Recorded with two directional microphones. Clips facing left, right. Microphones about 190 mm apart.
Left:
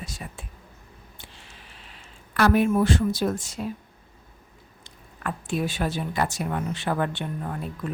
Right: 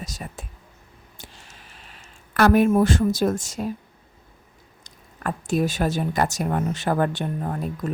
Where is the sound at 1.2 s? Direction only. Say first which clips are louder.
Right 5 dB; 45° right (ahead or behind).